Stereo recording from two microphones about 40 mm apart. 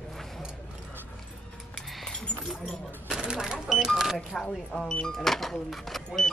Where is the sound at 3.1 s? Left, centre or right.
Right.